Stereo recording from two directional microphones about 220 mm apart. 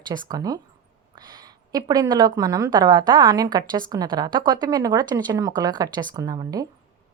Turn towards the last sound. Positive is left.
turn(degrees=-15)  # may be behind; listen again after turning